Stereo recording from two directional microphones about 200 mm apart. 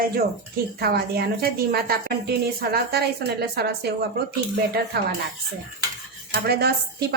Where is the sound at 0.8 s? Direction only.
50° right (ahead or behind).